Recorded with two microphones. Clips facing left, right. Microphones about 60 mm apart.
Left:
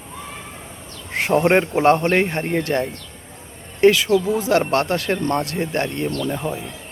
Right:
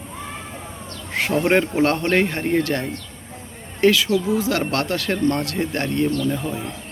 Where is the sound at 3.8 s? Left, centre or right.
Left.